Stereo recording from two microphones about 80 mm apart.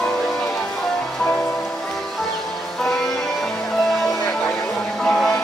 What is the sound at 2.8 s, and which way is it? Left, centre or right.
Music, centre.